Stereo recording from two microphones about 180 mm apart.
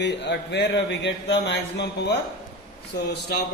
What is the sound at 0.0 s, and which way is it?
Speech, 70° left (ahead or behind).